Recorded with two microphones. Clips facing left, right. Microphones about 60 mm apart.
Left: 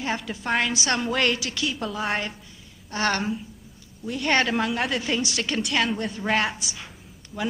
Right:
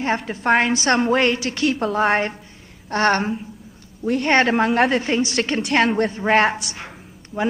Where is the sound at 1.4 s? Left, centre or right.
Right.